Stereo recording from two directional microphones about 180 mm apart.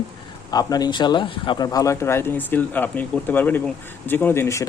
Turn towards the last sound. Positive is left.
turn(degrees=15)  # may be behind; listen again after turning